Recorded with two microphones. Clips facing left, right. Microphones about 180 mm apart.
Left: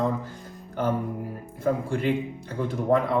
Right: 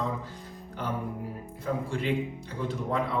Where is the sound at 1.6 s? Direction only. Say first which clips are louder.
Left 6 dB; 55° left (ahead or behind).